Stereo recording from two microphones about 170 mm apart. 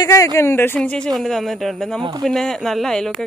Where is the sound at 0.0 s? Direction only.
20° left (ahead or behind).